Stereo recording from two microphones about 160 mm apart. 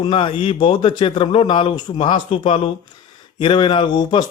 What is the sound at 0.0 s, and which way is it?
Speech, 30° left (ahead or behind).